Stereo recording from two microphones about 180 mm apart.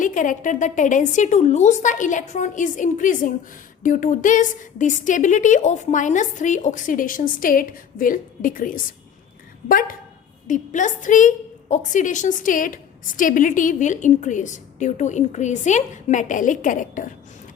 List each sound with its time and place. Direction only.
0.0 s a woman's voice: 45° left (ahead or behind)